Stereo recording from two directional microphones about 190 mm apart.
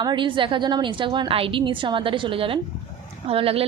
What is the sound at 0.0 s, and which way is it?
A woman's voice, 25° right (ahead or behind).